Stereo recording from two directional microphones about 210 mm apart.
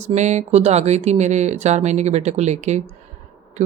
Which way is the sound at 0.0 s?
35° right (ahead or behind).